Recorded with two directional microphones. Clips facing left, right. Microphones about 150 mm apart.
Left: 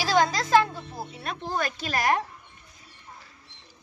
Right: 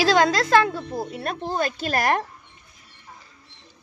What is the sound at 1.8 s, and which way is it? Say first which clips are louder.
Speech: right 2 dB; 55° right (ahead or behind).